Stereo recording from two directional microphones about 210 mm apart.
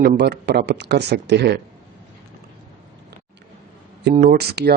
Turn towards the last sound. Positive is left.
turn(degrees=-50)  # may be behind; listen again after turning